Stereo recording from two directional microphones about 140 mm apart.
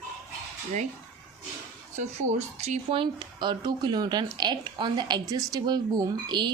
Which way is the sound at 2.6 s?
45° right (ahead or behind).